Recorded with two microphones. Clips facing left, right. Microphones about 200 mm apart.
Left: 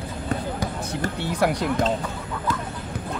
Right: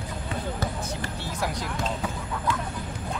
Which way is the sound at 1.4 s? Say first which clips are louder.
Left 9 dB; 65° left (ahead or behind).